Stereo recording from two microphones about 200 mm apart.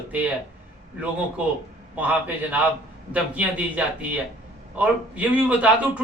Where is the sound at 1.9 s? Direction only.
10° right (ahead or behind).